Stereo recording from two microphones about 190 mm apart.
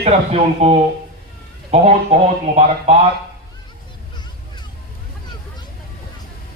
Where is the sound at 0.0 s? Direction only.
35° right (ahead or behind).